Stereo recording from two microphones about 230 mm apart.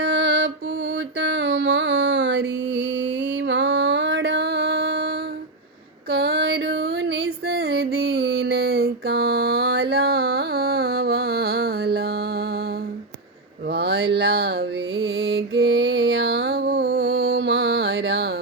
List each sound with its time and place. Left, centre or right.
0.0 s music: right
6.1 s female singing: right
7.4 s a sound: right
13.7 s mantra: right